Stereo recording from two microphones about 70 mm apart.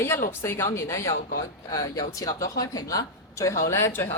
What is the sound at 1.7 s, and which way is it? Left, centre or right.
Speech, left.